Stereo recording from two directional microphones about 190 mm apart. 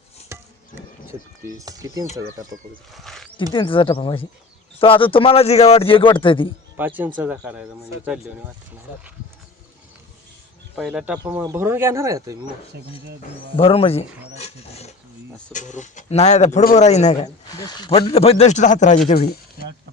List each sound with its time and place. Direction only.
1.5 s speech: 20° right (ahead or behind)
2.9 s a sound: centre (ahead or behind)
3.5 s a man's voice: 25° left (ahead or behind)
6.7 s speech: 10° right (ahead or behind)
10.8 s speech: 5° right (ahead or behind)
11.2 s speech: 15° right (ahead or behind)
13.6 s speech: 30° left (ahead or behind)
17.6 s speech: 20° left (ahead or behind); by 18.9 s 40° left (ahead or behind)
19.0 s speech: 30° left (ahead or behind)